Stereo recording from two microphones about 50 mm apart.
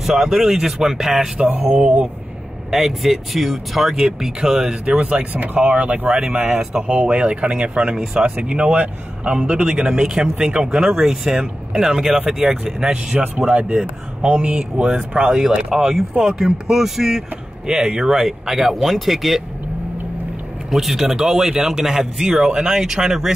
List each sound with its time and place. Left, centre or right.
0.0 s speech: centre
2.7 s speech: centre
4.8 s speech: right
5.3 s speech: right; by 13.3 s centre
13.5 s speech: right; by 19.4 s centre
20.7 s speech: centre